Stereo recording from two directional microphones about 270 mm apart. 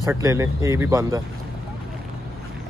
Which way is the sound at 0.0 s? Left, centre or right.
Centre.